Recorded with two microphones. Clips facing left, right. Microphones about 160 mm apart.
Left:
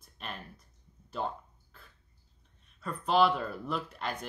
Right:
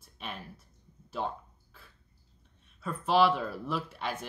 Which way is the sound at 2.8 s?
5° right (ahead or behind).